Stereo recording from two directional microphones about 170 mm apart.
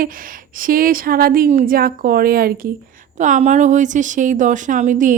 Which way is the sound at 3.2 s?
45° right (ahead or behind).